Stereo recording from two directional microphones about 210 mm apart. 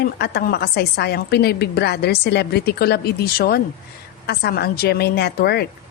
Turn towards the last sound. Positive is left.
turn(degrees=50)  # may be behind; listen again after turning